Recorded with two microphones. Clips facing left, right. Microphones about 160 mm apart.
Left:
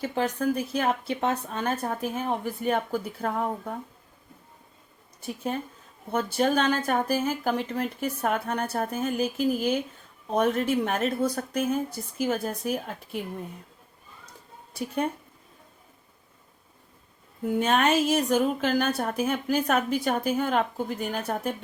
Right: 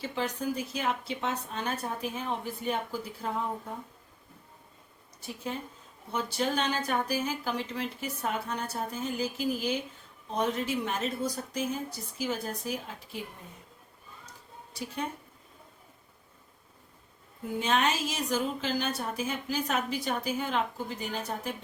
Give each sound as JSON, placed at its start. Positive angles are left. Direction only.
{"t": 0.0, "sound": "a woman's voice", "side_deg": 50}
{"t": 5.5, "sound": "a woman's voice", "side_deg": 55}
{"t": 14.7, "sound": "a woman's voice", "side_deg": 55}
{"t": 17.6, "sound": "a woman's voice", "side_deg": 55}